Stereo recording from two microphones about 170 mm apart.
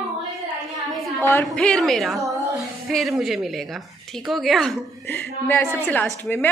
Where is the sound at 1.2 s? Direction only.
10° left (ahead or behind).